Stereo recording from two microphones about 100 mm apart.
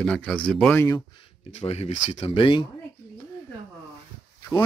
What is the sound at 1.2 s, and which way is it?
Speech, 90° left.